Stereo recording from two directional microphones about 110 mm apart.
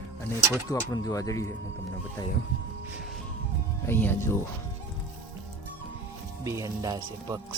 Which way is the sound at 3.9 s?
20° left (ahead or behind).